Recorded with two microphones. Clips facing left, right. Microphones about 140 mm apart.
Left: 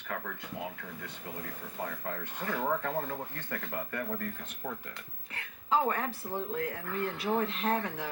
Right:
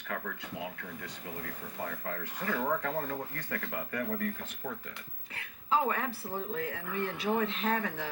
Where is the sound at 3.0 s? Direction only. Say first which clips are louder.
Right 1 dB; 40° right (ahead or behind).